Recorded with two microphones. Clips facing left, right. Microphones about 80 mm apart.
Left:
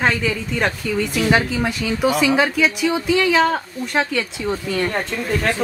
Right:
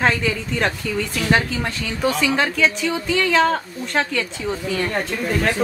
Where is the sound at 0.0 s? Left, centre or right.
Centre.